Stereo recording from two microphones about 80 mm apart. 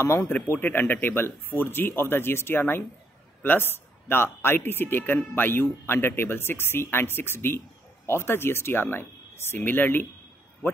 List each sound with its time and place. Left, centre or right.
0.0 s speech: left